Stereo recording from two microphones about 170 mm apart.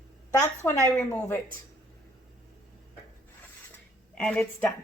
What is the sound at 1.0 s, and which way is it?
Speech, 5° left (ahead or behind).